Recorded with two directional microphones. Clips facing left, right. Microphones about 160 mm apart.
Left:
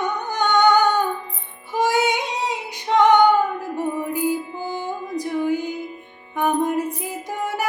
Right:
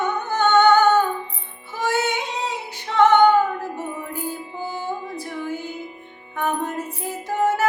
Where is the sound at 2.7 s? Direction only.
15° left (ahead or behind).